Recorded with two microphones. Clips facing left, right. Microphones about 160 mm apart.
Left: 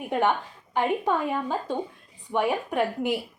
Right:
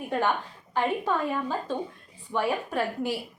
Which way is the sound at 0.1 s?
20° left (ahead or behind).